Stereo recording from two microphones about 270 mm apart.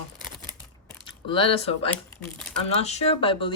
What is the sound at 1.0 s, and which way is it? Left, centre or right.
Speech, centre.